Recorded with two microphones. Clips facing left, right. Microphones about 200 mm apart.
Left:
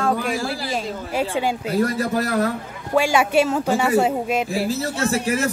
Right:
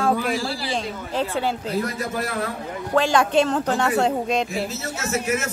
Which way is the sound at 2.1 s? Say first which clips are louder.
Left 5 dB; 40° left (ahead or behind).